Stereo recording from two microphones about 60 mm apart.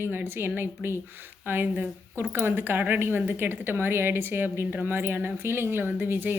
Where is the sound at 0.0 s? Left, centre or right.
Right.